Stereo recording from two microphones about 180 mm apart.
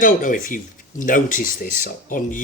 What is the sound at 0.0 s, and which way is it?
Speech, 50° left (ahead or behind).